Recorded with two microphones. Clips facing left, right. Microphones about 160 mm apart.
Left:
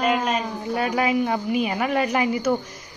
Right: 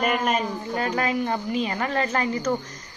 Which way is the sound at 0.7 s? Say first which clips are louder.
Left 3 dB; 10° left (ahead or behind).